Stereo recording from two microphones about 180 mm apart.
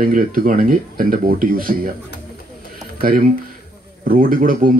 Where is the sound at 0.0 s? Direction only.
50° right (ahead or behind).